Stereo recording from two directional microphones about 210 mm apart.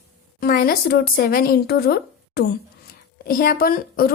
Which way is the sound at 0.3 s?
45° left (ahead or behind).